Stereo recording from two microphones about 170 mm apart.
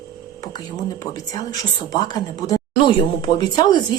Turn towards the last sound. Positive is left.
turn(degrees=25)  # may be behind; listen again after turning